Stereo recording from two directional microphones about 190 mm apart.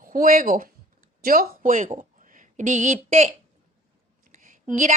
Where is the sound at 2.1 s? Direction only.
45° right (ahead or behind).